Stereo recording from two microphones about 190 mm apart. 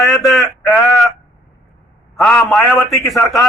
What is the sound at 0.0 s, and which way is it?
Speech, centre (ahead or behind).